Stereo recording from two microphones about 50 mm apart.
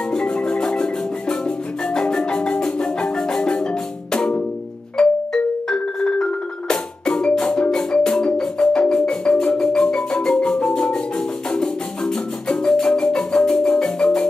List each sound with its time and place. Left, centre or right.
0.1 s marimba: centre
2.0 s marimba: centre
4.9 s music: centre